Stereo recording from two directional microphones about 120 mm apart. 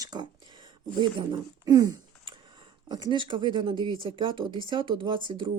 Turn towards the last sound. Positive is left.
turn(degrees=-45)  # may be behind; listen again after turning